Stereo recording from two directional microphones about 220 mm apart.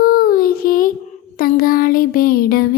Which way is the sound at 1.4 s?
40° left (ahead or behind).